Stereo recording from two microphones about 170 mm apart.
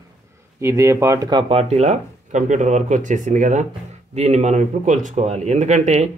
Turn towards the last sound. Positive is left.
turn(degrees=-40)  # may be behind; listen again after turning